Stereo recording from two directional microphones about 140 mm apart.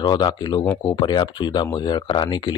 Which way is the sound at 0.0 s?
30° left (ahead or behind).